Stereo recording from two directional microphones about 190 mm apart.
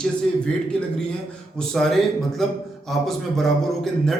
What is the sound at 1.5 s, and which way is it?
A man's voice, centre (ahead or behind).